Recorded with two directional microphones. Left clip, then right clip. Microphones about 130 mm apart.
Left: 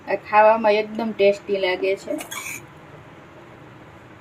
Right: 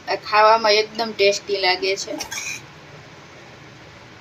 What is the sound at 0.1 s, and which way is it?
Speech, 55° left (ahead or behind).